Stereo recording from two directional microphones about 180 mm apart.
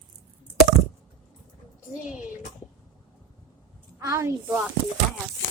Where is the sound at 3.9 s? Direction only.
15° right (ahead or behind).